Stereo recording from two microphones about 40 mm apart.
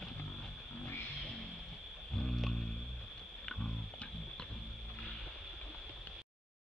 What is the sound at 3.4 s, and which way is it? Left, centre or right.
Pig, centre.